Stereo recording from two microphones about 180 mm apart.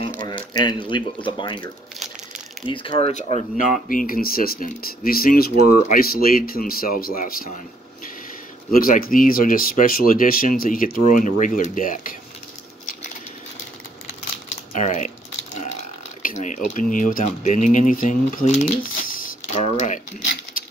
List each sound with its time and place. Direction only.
0.5 s speech: 25° left (ahead or behind); by 12.2 s 50° left (ahead or behind)
14.7 s typing: 45° left (ahead or behind)
16.2 s speech: 45° left (ahead or behind)